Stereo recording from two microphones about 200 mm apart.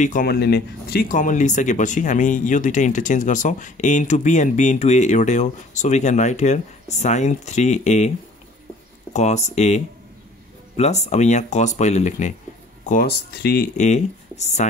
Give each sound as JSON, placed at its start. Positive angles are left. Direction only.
{"t": 0.0, "sound": "speech", "side_deg": 45}
{"t": 9.1, "sound": "speech", "side_deg": 35}
{"t": 10.8, "sound": "speech", "side_deg": 35}
{"t": 13.7, "sound": "speech", "side_deg": 35}